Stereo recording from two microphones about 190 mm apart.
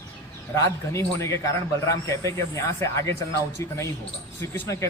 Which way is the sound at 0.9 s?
15° left (ahead or behind).